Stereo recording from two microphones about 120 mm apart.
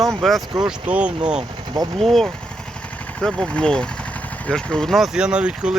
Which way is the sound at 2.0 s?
Centre (ahead or behind).